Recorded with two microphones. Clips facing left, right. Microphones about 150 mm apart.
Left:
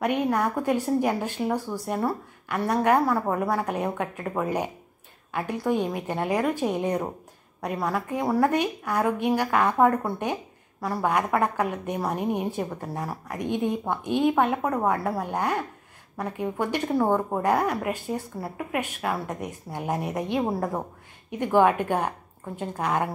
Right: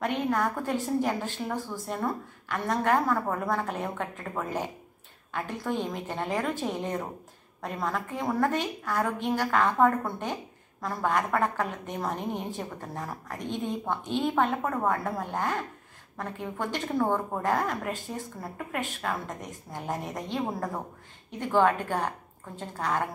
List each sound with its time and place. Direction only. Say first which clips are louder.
0.0 s a woman's voice: left 3 dB; 15° left (ahead or behind)